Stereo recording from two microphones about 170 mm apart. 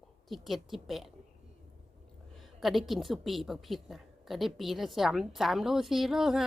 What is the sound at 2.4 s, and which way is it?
A woman's voice, centre (ahead or behind).